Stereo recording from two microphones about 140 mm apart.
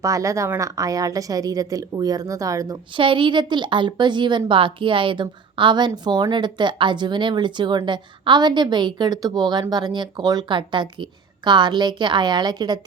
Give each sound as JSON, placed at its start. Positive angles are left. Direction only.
{"t": 0.0, "sound": "a woman's voice", "side_deg": -20}
{"t": 2.9, "sound": "a woman's voice", "side_deg": -35}